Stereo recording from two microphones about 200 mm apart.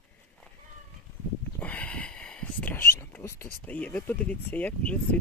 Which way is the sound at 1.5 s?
10° left (ahead or behind).